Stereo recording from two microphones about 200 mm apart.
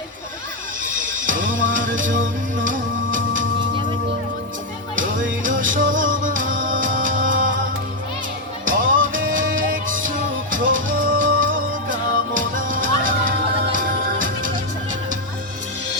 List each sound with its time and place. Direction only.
1.6 s music: 70° right (ahead or behind)
1.9 s music: 40° right (ahead or behind)
3.2 s music: 75° right (ahead or behind)
5.2 s music: 40° right (ahead or behind)
8.6 s music: 45° right (ahead or behind)